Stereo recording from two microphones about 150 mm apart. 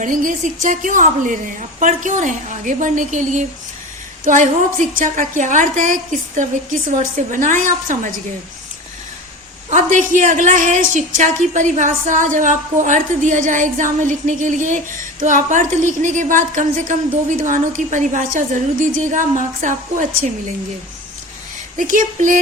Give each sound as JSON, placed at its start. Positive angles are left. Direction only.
{"t": 0.0, "sound": "a woman's voice", "side_deg": -60}
{"t": 9.6, "sound": "a woman's voice", "side_deg": -55}
{"t": 21.8, "sound": "a woman's voice", "side_deg": -60}